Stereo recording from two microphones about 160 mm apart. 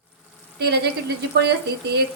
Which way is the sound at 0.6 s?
90° right.